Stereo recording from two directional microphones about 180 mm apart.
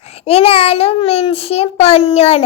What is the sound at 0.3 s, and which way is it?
A child's voice, 30° left (ahead or behind).